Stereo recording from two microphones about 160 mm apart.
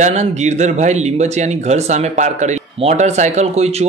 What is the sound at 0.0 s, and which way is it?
Speech, 45° right (ahead or behind).